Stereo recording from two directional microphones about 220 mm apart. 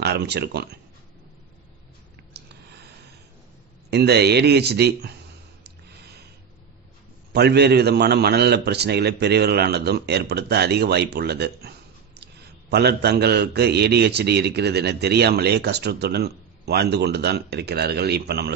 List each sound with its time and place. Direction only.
0.0 s speech: 50° right (ahead or behind)
2.3 s a sound: 50° right (ahead or behind)
3.9 s a man's voice: 50° right (ahead or behind)
7.3 s a man's voice: 50° right (ahead or behind)